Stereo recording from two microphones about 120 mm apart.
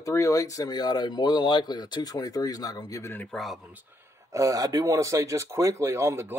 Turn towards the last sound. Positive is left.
turn(degrees=-25)  # may be behind; listen again after turning